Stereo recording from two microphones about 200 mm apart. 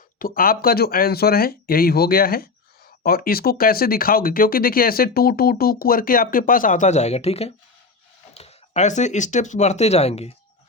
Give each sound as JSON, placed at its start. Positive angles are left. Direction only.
{"t": 0.2, "sound": "speech", "side_deg": 45}